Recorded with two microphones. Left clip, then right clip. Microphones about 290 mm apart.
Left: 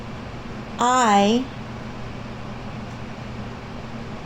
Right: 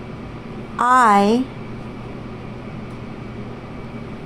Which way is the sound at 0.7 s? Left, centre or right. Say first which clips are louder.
Right 4 dB; right.